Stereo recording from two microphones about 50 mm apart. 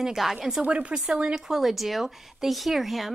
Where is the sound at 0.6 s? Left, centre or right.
Right.